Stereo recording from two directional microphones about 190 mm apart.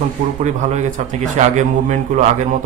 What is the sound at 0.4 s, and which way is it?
Speech, 40° right (ahead or behind).